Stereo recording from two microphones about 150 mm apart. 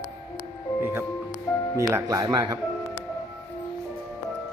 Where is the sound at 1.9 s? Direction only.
20° right (ahead or behind).